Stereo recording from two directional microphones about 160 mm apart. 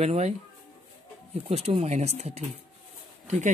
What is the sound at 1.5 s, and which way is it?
Speech, 40° right (ahead or behind).